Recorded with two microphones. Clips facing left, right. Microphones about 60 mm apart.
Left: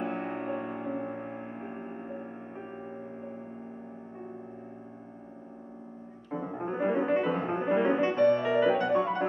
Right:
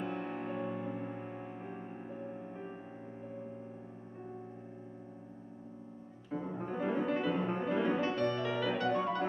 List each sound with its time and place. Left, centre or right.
0.0 s music: left
6.3 s music: left